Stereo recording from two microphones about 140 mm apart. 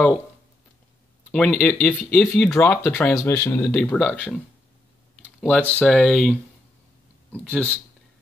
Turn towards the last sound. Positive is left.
turn(degrees=10)  # may be behind; listen again after turning